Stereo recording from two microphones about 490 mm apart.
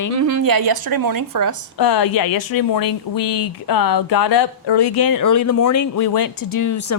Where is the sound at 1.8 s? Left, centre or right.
Left.